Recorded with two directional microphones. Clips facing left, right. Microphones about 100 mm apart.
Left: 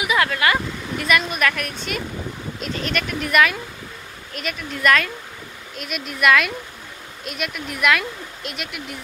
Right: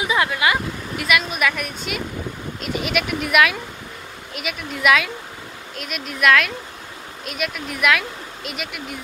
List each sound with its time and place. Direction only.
0.0 s speech: 20° right (ahead or behind)
0.9 s speech: 5° right (ahead or behind)